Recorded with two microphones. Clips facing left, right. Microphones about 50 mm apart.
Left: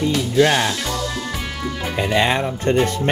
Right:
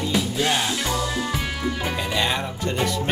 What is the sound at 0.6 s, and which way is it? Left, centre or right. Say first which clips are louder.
Music: left 1 dB; centre.